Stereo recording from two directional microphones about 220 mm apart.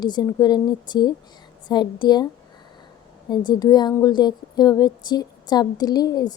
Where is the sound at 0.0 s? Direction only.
20° left (ahead or behind).